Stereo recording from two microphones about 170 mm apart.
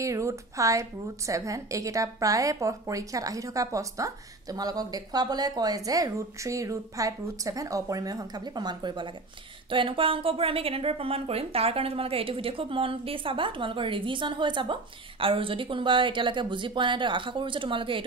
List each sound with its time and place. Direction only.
0.0 s a woman's voice: 20° right (ahead or behind)